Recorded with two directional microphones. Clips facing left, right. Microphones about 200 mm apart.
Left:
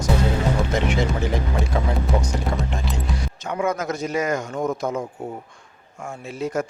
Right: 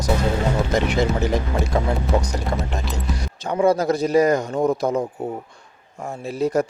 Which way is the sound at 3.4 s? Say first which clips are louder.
Right 7 dB; 35° right (ahead or behind).